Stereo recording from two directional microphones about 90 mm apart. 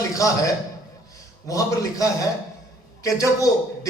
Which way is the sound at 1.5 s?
40° left (ahead or behind).